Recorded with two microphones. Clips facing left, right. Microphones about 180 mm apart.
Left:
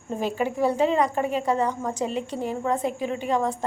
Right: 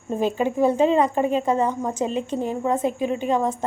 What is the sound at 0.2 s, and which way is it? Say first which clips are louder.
A woman's voice: right 4 dB; 20° right (ahead or behind).